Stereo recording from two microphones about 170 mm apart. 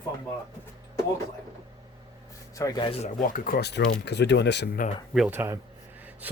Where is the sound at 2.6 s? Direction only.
25° left (ahead or behind).